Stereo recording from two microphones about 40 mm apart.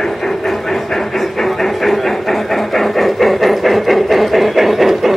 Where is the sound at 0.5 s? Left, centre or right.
Centre.